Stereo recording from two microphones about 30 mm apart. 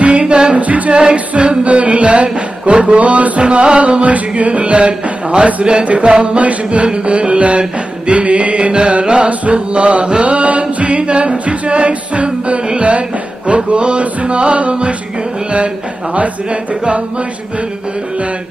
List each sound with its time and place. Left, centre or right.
0.2 s music: right
0.6 s music: right
1.1 s music: right
3.0 s music: right
3.8 s music: right
10.2 s a capella: right
12.7 s music: right